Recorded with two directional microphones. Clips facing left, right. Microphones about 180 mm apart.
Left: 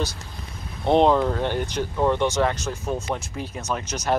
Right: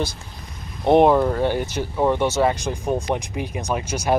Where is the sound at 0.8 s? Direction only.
10° right (ahead or behind).